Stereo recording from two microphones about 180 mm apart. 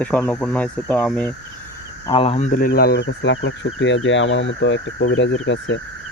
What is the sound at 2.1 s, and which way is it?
Speech, 30° left (ahead or behind).